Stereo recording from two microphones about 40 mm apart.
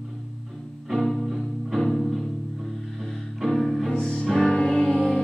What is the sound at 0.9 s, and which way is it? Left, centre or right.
Music, centre.